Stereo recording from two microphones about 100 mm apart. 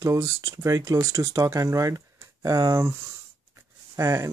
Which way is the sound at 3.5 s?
30° right (ahead or behind).